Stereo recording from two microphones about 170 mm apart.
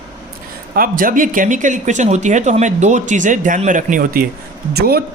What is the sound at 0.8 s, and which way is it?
Speech, 55° right (ahead or behind).